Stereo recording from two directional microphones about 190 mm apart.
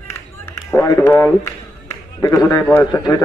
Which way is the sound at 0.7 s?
15° left (ahead or behind).